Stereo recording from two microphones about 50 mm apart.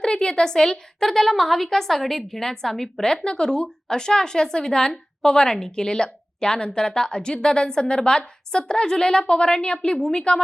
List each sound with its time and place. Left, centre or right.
0.0 s a woman's voice: centre